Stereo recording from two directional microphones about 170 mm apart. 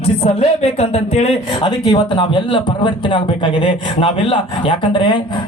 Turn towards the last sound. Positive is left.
turn(degrees=30)  # may be behind; listen again after turning